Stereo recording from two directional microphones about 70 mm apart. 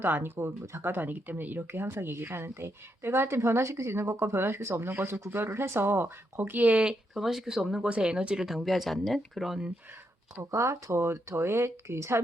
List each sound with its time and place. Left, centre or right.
0.0 s speech: right
7.1 s speech: centre
8.4 s speech: centre
10.5 s speech: right